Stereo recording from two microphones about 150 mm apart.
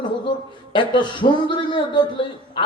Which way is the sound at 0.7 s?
30° left (ahead or behind).